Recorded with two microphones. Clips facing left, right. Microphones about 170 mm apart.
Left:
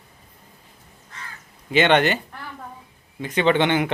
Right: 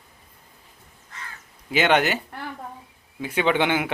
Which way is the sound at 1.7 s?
10° right (ahead or behind).